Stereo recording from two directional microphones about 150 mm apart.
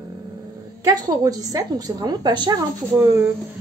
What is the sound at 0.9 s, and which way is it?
A woman's voice, 25° right (ahead or behind).